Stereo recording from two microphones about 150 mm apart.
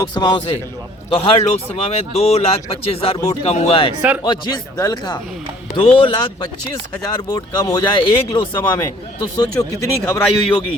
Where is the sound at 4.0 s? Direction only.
10° right (ahead or behind).